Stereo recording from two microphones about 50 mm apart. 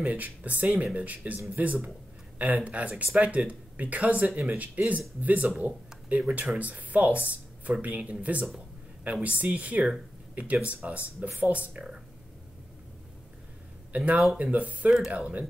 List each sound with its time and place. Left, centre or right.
0.0 s speech: right
13.9 s speech: right